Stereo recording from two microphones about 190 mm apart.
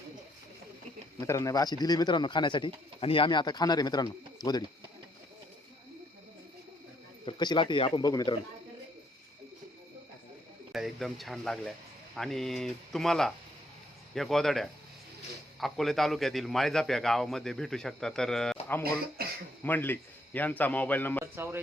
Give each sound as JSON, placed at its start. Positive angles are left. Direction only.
{"t": 1.2, "sound": "speech", "side_deg": 15}
{"t": 7.3, "sound": "speech", "side_deg": 25}
{"t": 10.7, "sound": "a man's voice", "side_deg": 0}
{"t": 18.8, "sound": "speech", "side_deg": -55}
{"t": 19.6, "sound": "speech", "side_deg": 10}
{"t": 21.3, "sound": "speech", "side_deg": -10}